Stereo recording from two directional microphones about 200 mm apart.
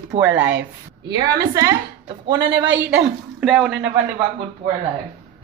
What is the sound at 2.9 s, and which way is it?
A woman's voice, 5° right (ahead or behind).